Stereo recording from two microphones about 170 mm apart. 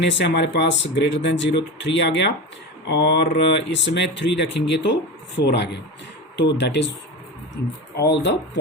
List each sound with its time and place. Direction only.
0.0 s speech: 90° left
7.9 s speech: 85° left